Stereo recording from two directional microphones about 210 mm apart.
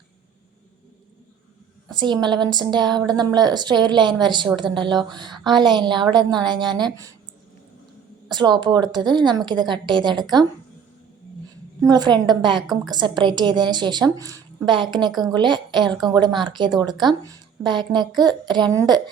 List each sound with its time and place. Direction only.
2.0 s a woman's voice: 20° right (ahead or behind)
8.3 s a woman's voice: 20° right (ahead or behind)
11.8 s a woman's voice: 20° right (ahead or behind)